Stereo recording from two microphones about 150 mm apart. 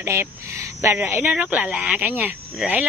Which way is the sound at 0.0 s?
15° right (ahead or behind).